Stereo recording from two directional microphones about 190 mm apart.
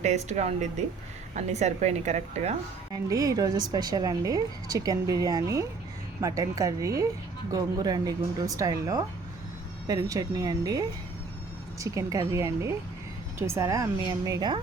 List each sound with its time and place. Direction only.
0.0 s a woman's voice: 35° right (ahead or behind)
2.9 s a woman's voice: 15° right (ahead or behind)